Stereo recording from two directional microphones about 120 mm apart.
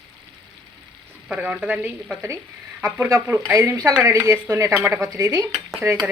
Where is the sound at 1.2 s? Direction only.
10° right (ahead or behind).